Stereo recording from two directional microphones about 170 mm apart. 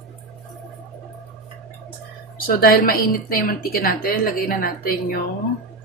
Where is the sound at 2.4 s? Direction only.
60° left (ahead or behind).